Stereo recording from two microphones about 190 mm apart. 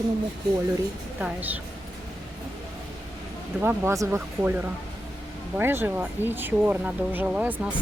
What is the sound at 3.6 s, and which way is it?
Speech, 10° right (ahead or behind).